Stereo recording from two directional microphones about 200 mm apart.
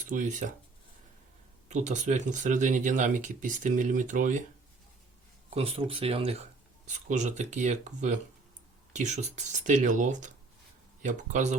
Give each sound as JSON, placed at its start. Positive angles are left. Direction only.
{"t": 0.1, "sound": "speech", "side_deg": -40}
{"t": 1.7, "sound": "speech", "side_deg": -35}
{"t": 5.5, "sound": "speech", "side_deg": -30}